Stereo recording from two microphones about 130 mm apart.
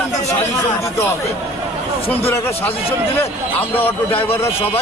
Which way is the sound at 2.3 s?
20° left (ahead or behind).